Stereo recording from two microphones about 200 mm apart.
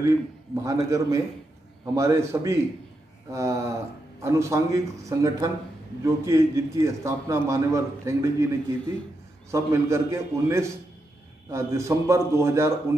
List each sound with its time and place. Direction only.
0.7 s a man's voice: 15° right (ahead or behind)